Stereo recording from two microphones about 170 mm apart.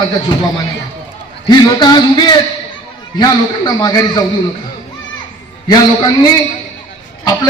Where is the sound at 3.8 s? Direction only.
25° left (ahead or behind).